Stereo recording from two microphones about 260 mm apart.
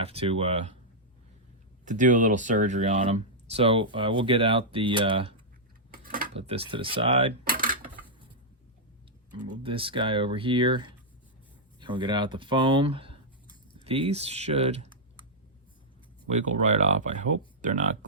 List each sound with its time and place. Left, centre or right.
0.0 s speech: right
1.8 s speech: right
7.4 s dishes: right
9.5 s speech: centre
16.3 s speech: right